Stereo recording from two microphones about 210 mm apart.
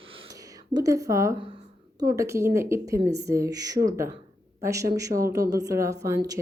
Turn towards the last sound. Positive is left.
turn(degrees=-15)  # may be behind; listen again after turning